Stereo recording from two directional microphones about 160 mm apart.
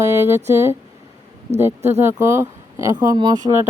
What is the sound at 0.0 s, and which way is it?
Speech, 15° right (ahead or behind).